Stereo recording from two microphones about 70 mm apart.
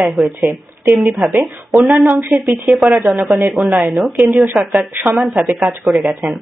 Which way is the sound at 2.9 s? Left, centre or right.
Centre.